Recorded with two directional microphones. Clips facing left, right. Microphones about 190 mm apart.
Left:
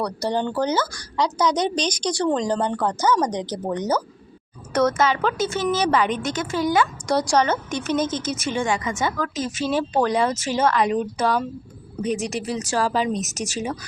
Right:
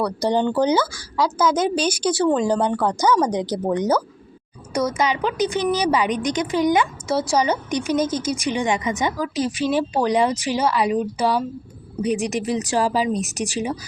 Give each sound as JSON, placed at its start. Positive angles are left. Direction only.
{"t": 0.0, "sound": "a woman's voice", "side_deg": -20}
{"t": 0.9, "sound": "a woman's voice", "side_deg": -5}
{"t": 7.1, "sound": "a woman's voice", "side_deg": -5}